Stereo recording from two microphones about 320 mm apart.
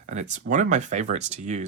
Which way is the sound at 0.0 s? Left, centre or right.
Right.